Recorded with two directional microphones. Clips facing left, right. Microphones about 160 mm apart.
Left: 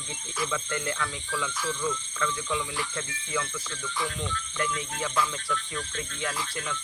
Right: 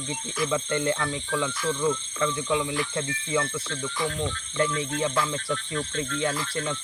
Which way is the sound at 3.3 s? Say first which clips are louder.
Right 5 dB; 30° right (ahead or behind).